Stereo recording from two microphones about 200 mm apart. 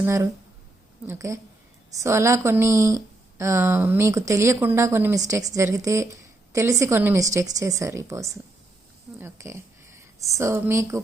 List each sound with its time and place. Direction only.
0.0 s speech: 15° right (ahead or behind)